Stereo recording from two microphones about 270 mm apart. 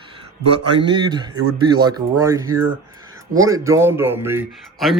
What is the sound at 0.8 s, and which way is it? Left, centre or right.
A man's voice, centre.